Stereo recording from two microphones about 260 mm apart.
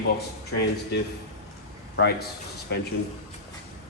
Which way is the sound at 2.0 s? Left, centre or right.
Left.